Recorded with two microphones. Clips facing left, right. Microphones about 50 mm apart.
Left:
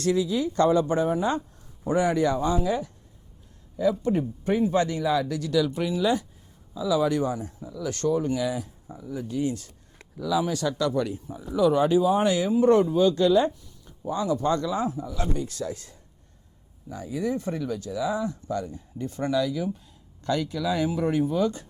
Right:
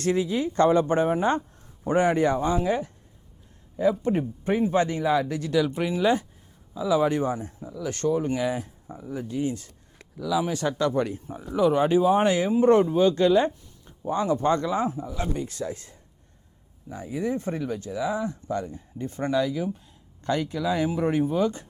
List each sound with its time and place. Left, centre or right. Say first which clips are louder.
0.0 s speech: even; right
4.0 s speech: even; right
7.8 s speech: even; right
9.4 s speech: left 1 dB; centre
10.5 s speech: right 1 dB; right
11.5 s speech: even; right